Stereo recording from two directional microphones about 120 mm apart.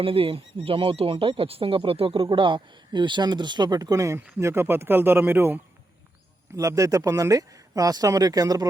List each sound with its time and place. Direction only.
0.0 s speech: 50° right (ahead or behind); by 5.5 s 15° right (ahead or behind)
6.6 s speech: 30° right (ahead or behind)